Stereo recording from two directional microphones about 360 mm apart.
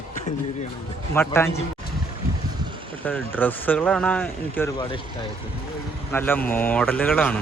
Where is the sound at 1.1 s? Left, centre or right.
Centre.